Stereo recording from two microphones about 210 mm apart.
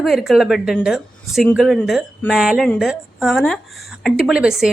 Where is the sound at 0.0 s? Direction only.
Centre (ahead or behind).